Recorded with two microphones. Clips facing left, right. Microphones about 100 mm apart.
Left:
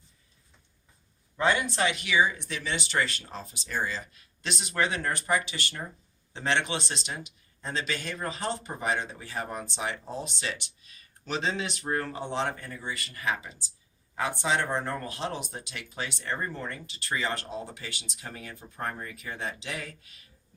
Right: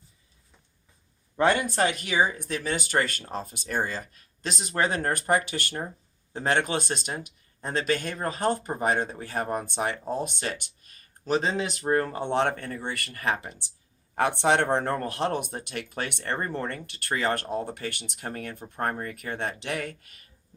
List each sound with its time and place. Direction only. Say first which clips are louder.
1.4 s speech: right 3 dB; 50° right (ahead or behind)
12.2 s speech: right 6 dB; 60° right (ahead or behind)